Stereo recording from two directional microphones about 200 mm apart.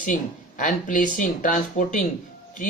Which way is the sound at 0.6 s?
40° left (ahead or behind).